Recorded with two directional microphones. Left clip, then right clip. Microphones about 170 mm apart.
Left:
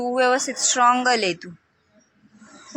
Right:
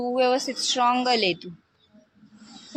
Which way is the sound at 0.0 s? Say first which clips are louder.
Left 3 dB; centre (ahead or behind).